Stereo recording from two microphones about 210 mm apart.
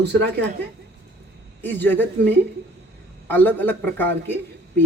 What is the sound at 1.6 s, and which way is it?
Speech, 10° left (ahead or behind).